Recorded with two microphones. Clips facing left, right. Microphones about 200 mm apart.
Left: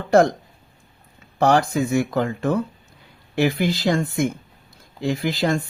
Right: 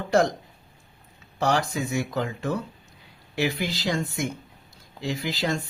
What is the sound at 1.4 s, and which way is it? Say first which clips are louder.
Speech: left 7 dB; 55° left (ahead or behind).